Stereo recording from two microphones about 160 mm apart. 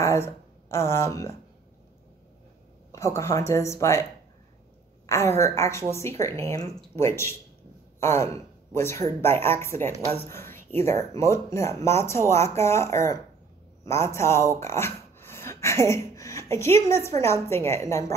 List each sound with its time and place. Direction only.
0.0 s speech: 15° left (ahead or behind)
2.9 s a woman's voice: 20° left (ahead or behind)
8.0 s gasp: 15° left (ahead or behind)
8.7 s speech: 15° left (ahead or behind)